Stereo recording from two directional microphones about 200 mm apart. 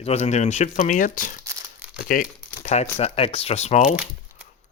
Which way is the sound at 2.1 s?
40° left (ahead or behind).